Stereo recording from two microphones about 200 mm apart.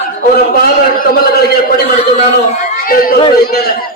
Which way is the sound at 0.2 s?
50° left (ahead or behind).